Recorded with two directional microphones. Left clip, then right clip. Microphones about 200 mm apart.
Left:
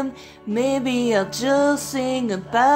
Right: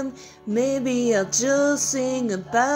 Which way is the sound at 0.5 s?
5° right (ahead or behind).